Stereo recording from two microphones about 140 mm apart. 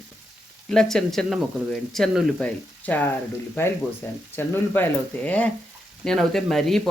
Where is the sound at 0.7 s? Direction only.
5° left (ahead or behind).